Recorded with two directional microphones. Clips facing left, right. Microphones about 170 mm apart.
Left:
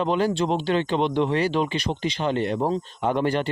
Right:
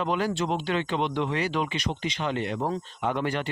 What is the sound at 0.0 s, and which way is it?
Speech, 30° left (ahead or behind).